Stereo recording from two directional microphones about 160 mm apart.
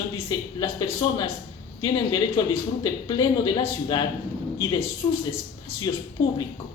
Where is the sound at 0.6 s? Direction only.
25° left (ahead or behind).